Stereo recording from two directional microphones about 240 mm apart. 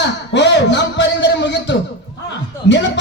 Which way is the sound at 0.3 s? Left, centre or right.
Left.